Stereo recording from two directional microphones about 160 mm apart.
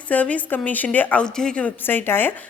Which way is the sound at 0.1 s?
10° left (ahead or behind).